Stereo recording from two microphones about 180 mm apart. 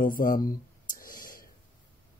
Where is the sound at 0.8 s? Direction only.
50° left (ahead or behind).